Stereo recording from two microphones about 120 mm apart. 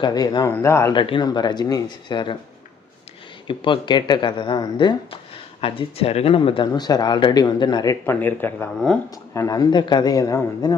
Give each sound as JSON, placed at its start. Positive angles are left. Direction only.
{"t": 0.0, "sound": "speech", "side_deg": 35}
{"t": 0.5, "sound": "speech", "side_deg": 25}
{"t": 0.9, "sound": "speech", "side_deg": 45}
{"t": 3.4, "sound": "speech", "side_deg": 45}
{"t": 8.0, "sound": "speech", "side_deg": 15}